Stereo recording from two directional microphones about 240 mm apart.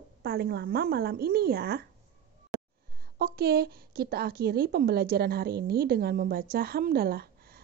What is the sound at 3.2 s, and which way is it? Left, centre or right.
Speech, right.